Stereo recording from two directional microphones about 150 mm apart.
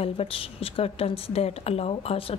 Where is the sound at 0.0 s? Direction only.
40° left (ahead or behind).